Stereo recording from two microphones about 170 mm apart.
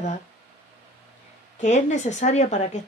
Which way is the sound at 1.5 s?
45° left (ahead or behind).